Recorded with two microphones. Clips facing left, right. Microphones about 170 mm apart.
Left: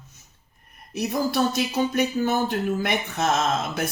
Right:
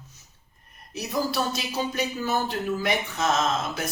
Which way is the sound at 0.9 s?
55° left (ahead or behind).